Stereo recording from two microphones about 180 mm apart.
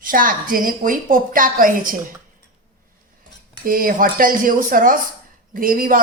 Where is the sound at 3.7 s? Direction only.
50° right (ahead or behind).